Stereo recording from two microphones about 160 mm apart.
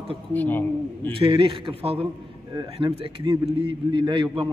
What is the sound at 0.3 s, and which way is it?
Speech, 10° left (ahead or behind).